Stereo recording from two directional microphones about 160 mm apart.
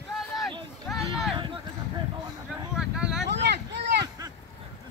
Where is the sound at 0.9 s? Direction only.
Centre (ahead or behind).